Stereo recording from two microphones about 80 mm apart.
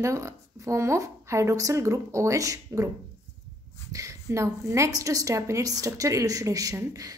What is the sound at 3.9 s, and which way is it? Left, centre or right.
A woman's voice, right.